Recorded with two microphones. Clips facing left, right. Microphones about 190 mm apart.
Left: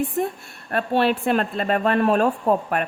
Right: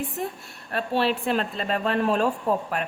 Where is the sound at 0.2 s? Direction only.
50° left (ahead or behind).